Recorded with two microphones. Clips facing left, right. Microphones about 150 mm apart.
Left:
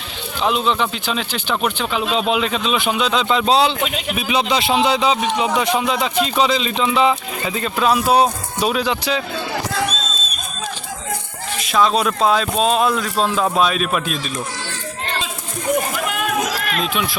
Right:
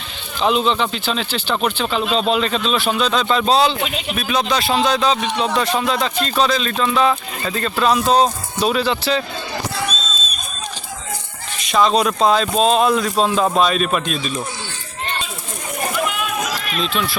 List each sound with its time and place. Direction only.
0.3 s speech: 5° left (ahead or behind)
11.6 s speech: centre (ahead or behind)
16.2 s run: 65° left (ahead or behind)
16.8 s speech: 10° left (ahead or behind)